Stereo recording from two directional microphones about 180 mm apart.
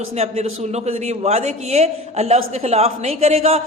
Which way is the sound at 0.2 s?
35° right (ahead or behind).